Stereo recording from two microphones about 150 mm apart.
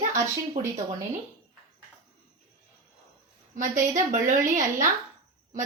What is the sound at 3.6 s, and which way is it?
A woman's voice, 60° right (ahead or behind).